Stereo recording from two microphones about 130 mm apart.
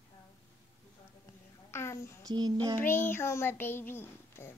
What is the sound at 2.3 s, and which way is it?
Child singing, 30° right (ahead or behind).